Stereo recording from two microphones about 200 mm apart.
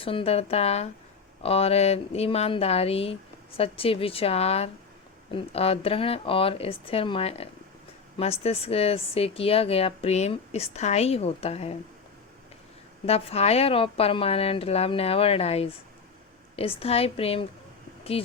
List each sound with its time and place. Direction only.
0.0 s a woman's voice: 25° left (ahead or behind)
13.1 s speech: 30° left (ahead or behind)